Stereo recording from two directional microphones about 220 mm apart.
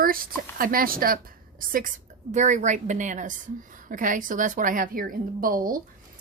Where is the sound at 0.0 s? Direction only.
40° right (ahead or behind).